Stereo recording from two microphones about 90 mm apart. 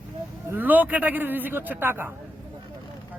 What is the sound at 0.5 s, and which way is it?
A man's voice, 20° right (ahead or behind).